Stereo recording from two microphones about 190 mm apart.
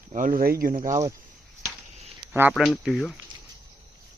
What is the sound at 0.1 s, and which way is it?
Speech, 45° right (ahead or behind).